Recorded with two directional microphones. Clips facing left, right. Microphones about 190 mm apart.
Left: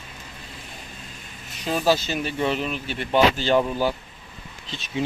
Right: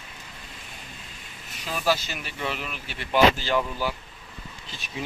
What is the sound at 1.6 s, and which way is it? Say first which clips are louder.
Speech: left 5 dB; 25° left (ahead or behind).